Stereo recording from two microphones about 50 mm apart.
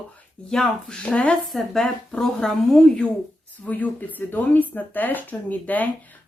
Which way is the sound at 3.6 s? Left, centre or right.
Left.